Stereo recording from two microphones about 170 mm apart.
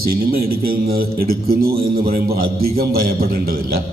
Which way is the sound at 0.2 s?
65° right (ahead or behind).